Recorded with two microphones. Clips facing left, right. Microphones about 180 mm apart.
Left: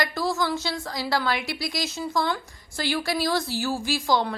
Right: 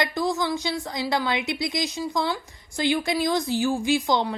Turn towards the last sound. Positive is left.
turn(degrees=-20)  # may be behind; listen again after turning